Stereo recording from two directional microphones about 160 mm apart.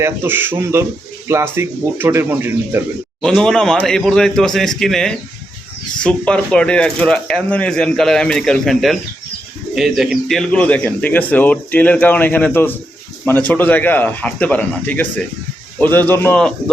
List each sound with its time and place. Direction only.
0.0 s speech: 15° right (ahead or behind)
3.2 s speech: 5° left (ahead or behind)